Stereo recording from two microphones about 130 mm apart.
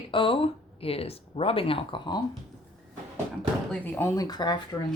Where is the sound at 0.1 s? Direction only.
40° left (ahead or behind).